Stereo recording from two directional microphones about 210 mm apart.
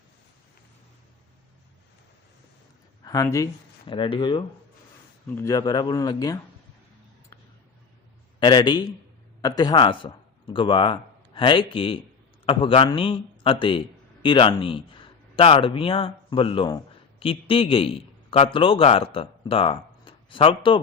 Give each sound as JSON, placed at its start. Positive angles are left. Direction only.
{"t": 3.0, "sound": "speech", "side_deg": 15}
{"t": 8.4, "sound": "a man's voice", "side_deg": 20}